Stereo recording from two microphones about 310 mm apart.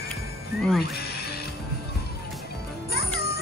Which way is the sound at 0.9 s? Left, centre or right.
Left.